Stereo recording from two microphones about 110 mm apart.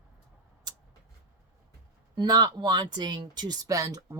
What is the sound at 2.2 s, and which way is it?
Speech, 35° right (ahead or behind).